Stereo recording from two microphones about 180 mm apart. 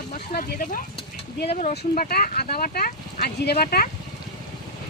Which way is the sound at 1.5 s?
40° left (ahead or behind).